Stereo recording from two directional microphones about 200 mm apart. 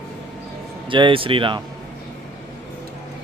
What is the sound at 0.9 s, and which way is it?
Speech, 25° right (ahead or behind).